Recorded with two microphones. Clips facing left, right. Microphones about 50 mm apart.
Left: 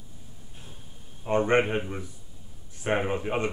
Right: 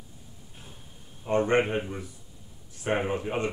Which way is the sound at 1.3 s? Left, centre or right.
Centre.